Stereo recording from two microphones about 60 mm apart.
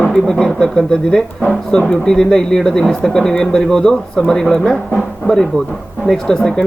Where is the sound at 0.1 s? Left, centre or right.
Centre.